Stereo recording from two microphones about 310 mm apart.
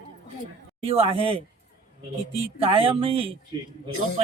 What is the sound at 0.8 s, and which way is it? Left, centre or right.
Speech, centre.